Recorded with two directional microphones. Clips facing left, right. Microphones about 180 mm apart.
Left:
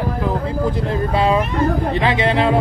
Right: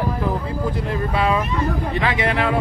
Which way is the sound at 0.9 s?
30° left (ahead or behind).